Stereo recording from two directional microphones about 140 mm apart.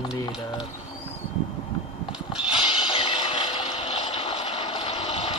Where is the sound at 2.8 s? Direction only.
35° left (ahead or behind).